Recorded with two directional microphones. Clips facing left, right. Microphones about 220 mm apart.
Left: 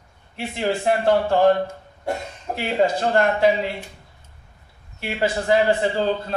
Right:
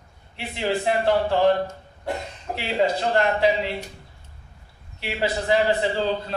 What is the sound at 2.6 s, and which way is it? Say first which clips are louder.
A man's voice: left 2 dB; 50° left (ahead or behind).